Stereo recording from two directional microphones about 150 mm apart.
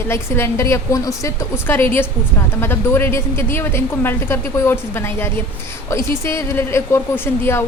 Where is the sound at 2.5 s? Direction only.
15° left (ahead or behind).